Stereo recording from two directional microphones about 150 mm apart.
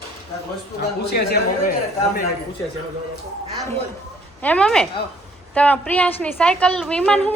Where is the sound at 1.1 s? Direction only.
90° left.